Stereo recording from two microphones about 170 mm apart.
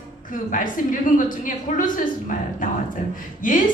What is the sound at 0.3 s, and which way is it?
A woman's voice, 50° left (ahead or behind).